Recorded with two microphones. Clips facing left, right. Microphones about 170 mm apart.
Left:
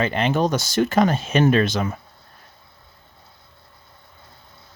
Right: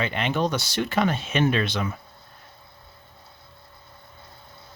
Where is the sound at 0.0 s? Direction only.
40° left (ahead or behind).